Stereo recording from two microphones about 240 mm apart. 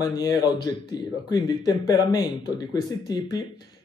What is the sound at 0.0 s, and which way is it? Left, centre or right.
Speech, centre.